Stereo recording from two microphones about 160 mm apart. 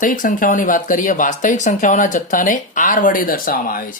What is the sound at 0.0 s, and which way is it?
Speech, 55° left (ahead or behind).